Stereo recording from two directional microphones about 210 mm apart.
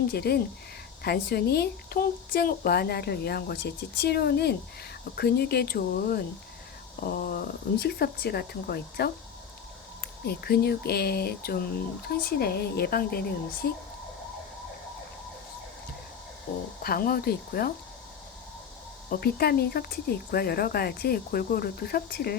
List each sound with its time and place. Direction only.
0.1 s speech: 50° left (ahead or behind)
10.2 s speech: 50° left (ahead or behind)
16.8 s speech: 45° left (ahead or behind)
19.1 s speech: 50° left (ahead or behind)